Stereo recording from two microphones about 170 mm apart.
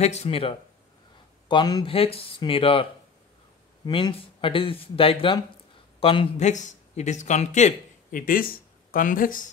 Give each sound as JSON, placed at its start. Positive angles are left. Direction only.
{"t": 0.0, "sound": "speech", "side_deg": 40}